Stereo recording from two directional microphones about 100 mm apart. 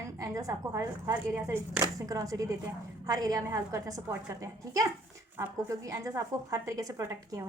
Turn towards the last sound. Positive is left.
turn(degrees=-30)  # may be behind; listen again after turning